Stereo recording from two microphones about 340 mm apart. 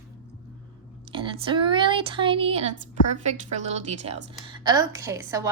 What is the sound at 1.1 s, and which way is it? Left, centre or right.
A woman's voice, centre.